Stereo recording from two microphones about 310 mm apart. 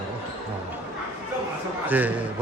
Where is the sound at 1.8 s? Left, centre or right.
Centre.